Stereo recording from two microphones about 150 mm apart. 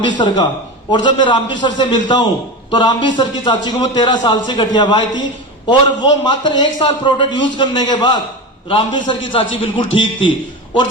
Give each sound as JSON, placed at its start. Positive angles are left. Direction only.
{"t": 0.0, "sound": "a man's voice", "side_deg": 30}